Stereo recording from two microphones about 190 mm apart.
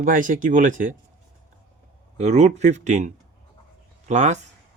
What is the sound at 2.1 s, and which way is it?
Speech, 35° right (ahead or behind).